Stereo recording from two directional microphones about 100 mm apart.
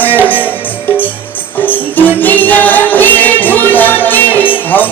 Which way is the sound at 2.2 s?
20° left (ahead or behind).